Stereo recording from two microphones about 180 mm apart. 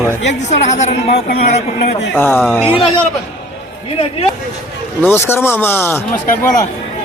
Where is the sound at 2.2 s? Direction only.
10° left (ahead or behind).